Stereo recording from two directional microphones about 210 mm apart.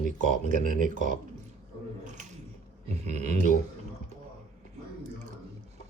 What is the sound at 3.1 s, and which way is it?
Speech, 30° right (ahead or behind).